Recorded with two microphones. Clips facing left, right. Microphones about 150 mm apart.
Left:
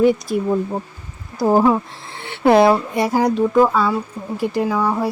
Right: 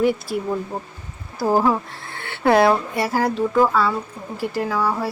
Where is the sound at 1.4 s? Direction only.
20° left (ahead or behind).